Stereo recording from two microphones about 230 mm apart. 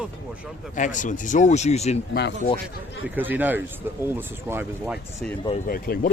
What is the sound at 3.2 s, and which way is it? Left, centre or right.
Speech, centre.